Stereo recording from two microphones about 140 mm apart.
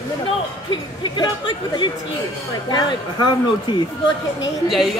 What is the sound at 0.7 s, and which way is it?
Speech, 35° left (ahead or behind).